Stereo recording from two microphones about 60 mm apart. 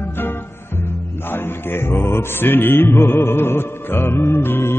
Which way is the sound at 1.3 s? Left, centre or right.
Left.